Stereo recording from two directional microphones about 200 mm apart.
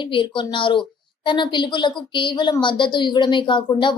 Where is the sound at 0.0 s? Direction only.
25° left (ahead or behind).